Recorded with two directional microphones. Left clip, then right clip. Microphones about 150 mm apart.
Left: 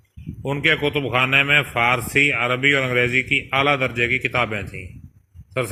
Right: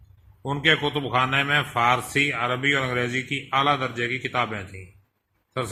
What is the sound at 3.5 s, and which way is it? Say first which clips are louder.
A man's voice: even; 20° left (ahead or behind).